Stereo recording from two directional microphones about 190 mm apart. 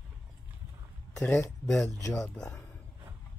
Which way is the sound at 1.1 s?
10° left (ahead or behind).